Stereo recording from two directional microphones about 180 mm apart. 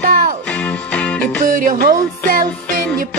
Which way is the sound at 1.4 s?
50° right (ahead or behind).